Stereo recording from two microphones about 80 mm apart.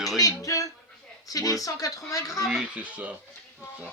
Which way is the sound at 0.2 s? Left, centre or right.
Left.